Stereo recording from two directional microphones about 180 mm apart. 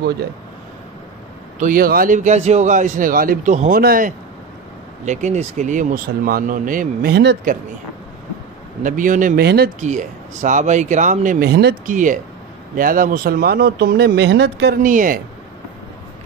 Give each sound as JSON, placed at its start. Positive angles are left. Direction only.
{"t": 1.6, "sound": "speech", "side_deg": -50}
{"t": 3.8, "sound": "speech", "side_deg": -55}
{"t": 5.0, "sound": "speech", "side_deg": -40}
{"t": 8.8, "sound": "speech", "side_deg": -45}
{"t": 9.8, "sound": "speech", "side_deg": -45}
{"t": 11.8, "sound": "speech", "side_deg": -45}
{"t": 14.8, "sound": "speech", "side_deg": -50}